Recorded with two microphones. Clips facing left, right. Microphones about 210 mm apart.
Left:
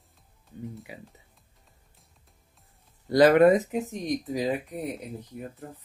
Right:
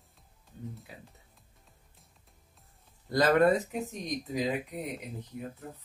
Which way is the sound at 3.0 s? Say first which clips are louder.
Left 6 dB; 15° left (ahead or behind).